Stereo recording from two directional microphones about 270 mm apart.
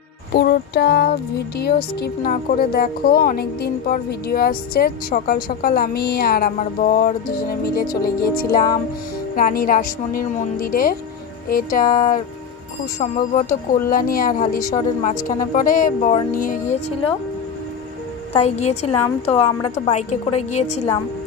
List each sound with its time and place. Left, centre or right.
0.3 s a woman's voice: left
18.3 s speech: left